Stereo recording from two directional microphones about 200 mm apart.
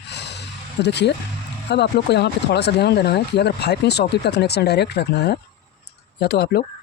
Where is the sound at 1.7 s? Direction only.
55° left (ahead or behind).